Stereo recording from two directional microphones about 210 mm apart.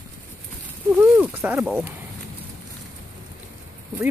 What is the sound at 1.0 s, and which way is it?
Speech, 10° right (ahead or behind).